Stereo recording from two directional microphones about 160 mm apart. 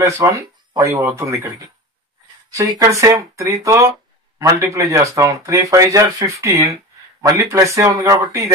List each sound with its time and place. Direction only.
0.0 s speech: 20° right (ahead or behind)
2.5 s speech: 20° right (ahead or behind)